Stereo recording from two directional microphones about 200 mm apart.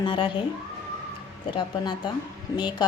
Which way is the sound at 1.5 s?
20° left (ahead or behind).